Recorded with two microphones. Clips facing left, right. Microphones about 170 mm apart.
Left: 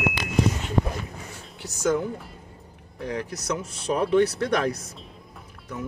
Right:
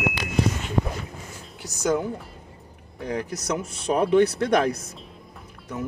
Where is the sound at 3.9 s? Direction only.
55° right (ahead or behind).